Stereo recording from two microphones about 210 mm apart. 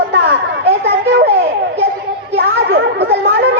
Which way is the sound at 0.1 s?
50° right (ahead or behind).